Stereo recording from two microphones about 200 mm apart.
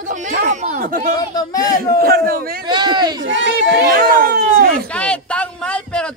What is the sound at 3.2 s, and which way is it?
Speech, 65° right (ahead or behind).